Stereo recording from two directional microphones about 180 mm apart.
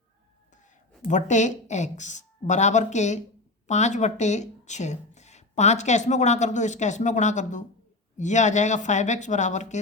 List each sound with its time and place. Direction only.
1.0 s speech: 40° left (ahead or behind)